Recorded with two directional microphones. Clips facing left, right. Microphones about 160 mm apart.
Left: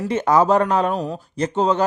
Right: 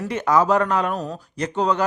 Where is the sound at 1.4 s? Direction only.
25° left (ahead or behind).